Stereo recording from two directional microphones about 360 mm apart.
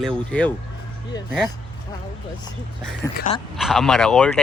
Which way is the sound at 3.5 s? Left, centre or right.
Centre.